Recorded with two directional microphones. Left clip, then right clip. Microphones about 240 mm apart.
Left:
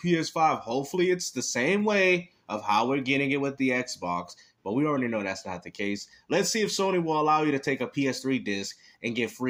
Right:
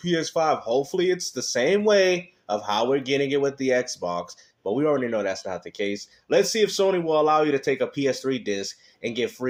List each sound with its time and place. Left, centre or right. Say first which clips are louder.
0.0 s speech: right 1 dB; left